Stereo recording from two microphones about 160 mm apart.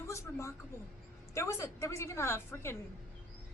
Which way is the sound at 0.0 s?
15° left (ahead or behind).